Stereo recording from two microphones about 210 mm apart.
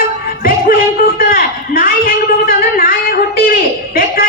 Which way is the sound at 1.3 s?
45° left (ahead or behind).